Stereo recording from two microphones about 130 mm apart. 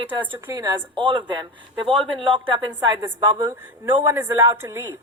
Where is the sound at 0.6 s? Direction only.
30° right (ahead or behind).